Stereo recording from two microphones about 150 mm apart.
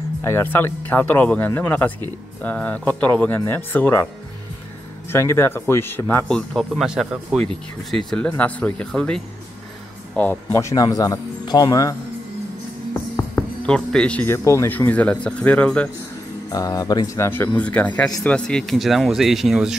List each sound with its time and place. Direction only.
0.2 s speech: 15° left (ahead or behind)
5.1 s speech: 15° left (ahead or behind); by 7.4 s 5° right (ahead or behind)
8.3 s speech: 10° left (ahead or behind)
13.1 s speech: 10° left (ahead or behind)
16.4 s speech: 25° left (ahead or behind); by 19.8 s 5° right (ahead or behind)